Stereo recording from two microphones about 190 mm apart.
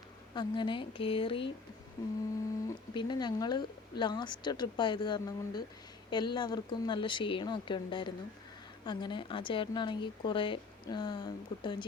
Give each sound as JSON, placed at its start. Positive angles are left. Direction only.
{"t": 0.3, "sound": "speech", "side_deg": 25}
{"t": 2.0, "sound": "a sound", "side_deg": 15}
{"t": 2.9, "sound": "speech", "side_deg": 25}